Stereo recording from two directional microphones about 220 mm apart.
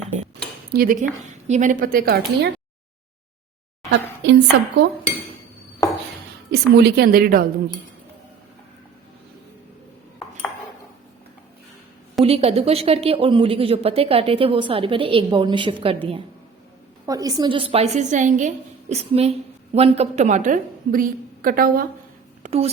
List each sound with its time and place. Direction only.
0.7 s a woman's voice: 40° right (ahead or behind)
4.2 s a woman's voice: 55° right (ahead or behind)
6.5 s a woman's voice: 45° right (ahead or behind)
12.2 s speech: 25° right (ahead or behind)
17.1 s a woman's voice: 15° right (ahead or behind); by 21.8 s 40° right (ahead or behind)
22.4 s speech: 30° right (ahead or behind)